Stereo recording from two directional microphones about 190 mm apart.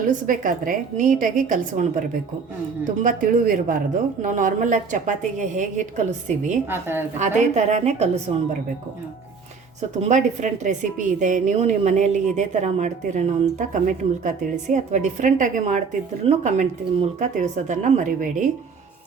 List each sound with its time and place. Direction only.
0.3 s a woman's voice: 45° right (ahead or behind)
3.0 s a woman's voice: 45° right (ahead or behind)
6.7 s a woman's voice: 10° right (ahead or behind)
7.2 s a woman's voice: 35° right (ahead or behind)
10.0 s a woman's voice: 40° right (ahead or behind)